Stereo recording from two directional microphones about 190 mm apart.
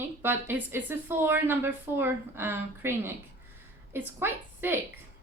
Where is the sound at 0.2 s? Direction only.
10° right (ahead or behind).